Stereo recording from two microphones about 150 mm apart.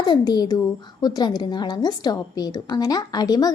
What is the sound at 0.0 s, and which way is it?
A woman's voice, 25° left (ahead or behind).